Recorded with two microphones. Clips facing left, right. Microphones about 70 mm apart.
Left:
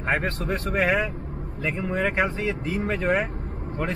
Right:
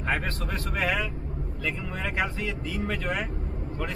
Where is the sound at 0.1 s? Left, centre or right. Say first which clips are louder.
Left 5 dB; left.